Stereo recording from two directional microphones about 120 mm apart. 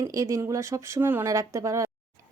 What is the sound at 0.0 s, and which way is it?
Speech, 25° right (ahead or behind).